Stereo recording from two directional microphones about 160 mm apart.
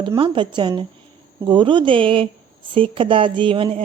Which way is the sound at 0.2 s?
30° right (ahead or behind).